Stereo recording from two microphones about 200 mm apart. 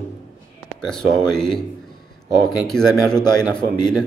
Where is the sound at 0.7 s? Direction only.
5° left (ahead or behind).